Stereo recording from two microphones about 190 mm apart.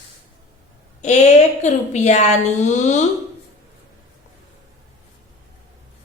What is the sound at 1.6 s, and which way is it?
A woman's voice, 35° left (ahead or behind).